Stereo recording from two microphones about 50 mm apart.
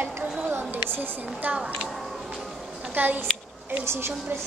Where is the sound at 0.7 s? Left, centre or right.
Right.